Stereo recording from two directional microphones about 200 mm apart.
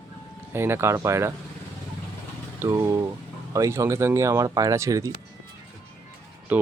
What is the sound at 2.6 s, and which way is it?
Vehicle, 15° right (ahead or behind).